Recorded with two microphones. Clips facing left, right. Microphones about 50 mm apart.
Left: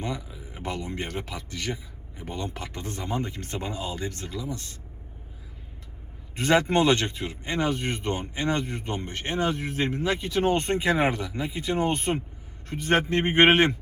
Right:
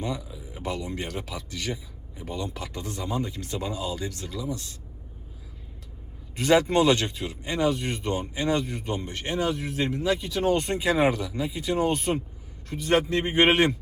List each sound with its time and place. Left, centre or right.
0.0 s speech: left
6.3 s speech: left